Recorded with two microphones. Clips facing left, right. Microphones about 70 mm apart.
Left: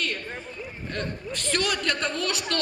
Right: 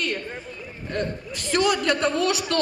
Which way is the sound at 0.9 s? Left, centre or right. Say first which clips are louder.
Right 4 dB; centre.